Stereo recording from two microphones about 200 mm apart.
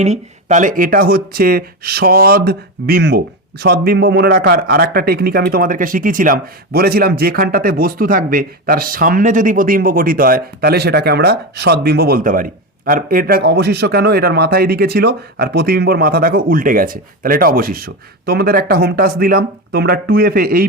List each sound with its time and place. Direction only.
0.0 s speech: 35° right (ahead or behind)